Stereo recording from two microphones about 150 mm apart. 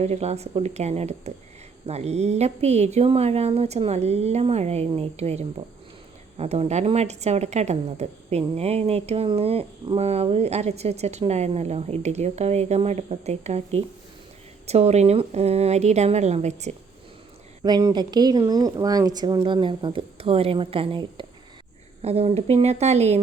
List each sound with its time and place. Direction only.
0.0 s a woman's voice: 45° right (ahead or behind)
17.6 s a woman's voice: 25° right (ahead or behind); by 23.2 s 45° right (ahead or behind)